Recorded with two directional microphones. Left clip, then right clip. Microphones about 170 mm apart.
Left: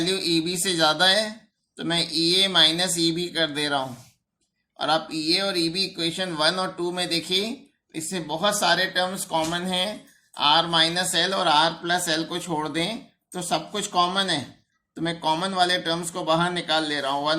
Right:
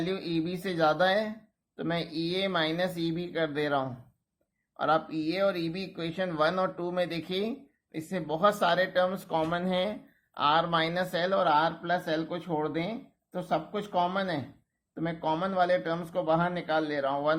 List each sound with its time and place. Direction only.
0.1 s speech: 20° right (ahead or behind)